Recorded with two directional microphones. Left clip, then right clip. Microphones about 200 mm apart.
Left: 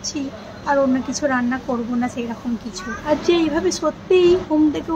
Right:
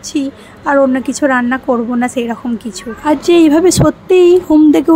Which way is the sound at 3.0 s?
60° right (ahead or behind).